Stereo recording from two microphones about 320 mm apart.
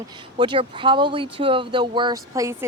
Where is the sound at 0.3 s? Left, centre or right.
Centre.